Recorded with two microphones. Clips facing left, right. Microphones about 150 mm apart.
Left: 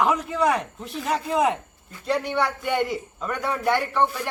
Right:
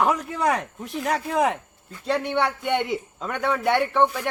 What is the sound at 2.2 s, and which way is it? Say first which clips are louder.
A man's voice: right 1 dB; 25° right (ahead or behind).